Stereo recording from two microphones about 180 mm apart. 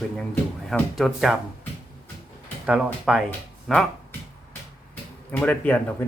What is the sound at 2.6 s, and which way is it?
Speech, 5° right (ahead or behind).